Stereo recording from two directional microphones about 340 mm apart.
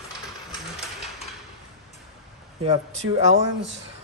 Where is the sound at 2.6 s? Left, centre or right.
Centre.